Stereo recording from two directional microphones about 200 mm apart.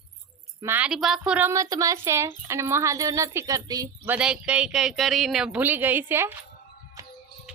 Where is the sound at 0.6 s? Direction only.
10° right (ahead or behind).